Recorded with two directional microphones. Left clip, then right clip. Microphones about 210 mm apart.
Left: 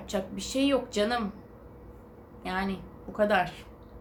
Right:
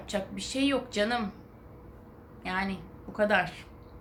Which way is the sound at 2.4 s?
Centre (ahead or behind).